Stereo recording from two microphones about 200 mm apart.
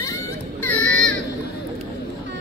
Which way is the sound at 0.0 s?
10° left (ahead or behind).